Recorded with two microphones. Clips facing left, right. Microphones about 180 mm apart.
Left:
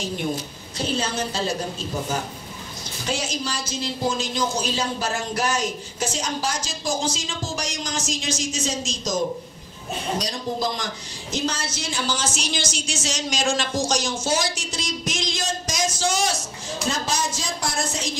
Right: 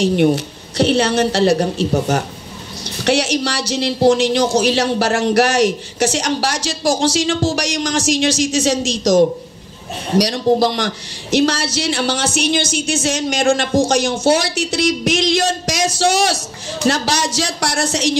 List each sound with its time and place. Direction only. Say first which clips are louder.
0.0 s a woman's voice: right 13 dB; 75° right (ahead or behind)